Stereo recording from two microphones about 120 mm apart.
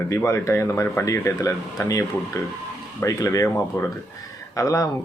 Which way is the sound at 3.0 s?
25° left (ahead or behind).